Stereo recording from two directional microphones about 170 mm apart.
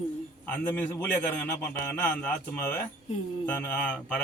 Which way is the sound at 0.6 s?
10° left (ahead or behind).